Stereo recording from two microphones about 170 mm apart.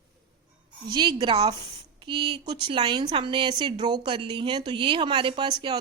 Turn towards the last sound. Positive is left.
turn(degrees=-30)  # may be behind; listen again after turning